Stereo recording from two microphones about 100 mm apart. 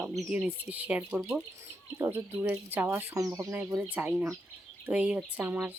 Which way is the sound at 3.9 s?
15° right (ahead or behind).